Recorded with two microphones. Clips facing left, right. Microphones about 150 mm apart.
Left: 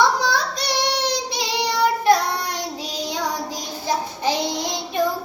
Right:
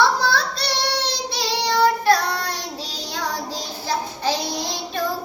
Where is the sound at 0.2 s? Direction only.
15° left (ahead or behind).